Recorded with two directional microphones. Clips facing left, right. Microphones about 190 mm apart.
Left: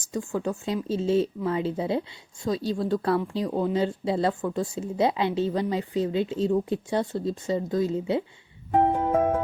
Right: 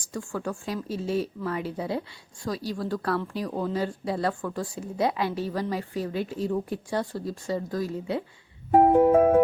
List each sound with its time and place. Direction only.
0.0 s a woman's voice: 20° left (ahead or behind)